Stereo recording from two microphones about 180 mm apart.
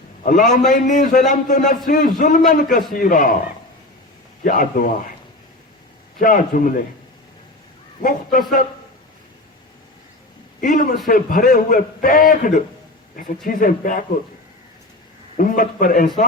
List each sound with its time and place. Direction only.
0.2 s a man's voice: 45° left (ahead or behind)
4.4 s a man's voice: 50° left (ahead or behind)
6.1 s a man's voice: 50° left (ahead or behind)
8.0 s a man's voice: 50° left (ahead or behind)
10.6 s a man's voice: 45° left (ahead or behind)
15.4 s a man's voice: 50° left (ahead or behind)